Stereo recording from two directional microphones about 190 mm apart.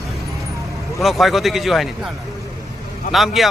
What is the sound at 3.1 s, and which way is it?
Speech, centre (ahead or behind).